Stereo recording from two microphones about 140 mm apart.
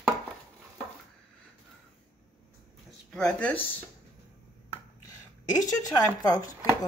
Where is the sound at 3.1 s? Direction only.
5° left (ahead or behind).